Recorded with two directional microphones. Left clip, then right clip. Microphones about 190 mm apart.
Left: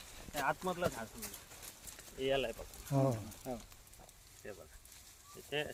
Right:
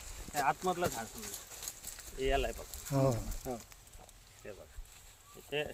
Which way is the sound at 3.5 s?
75° right (ahead or behind).